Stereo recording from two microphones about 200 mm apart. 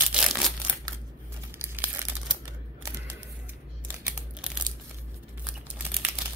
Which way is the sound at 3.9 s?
5° right (ahead or behind).